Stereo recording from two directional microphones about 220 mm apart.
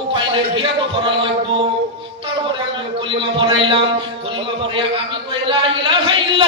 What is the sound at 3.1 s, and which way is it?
Speech, 25° right (ahead or behind).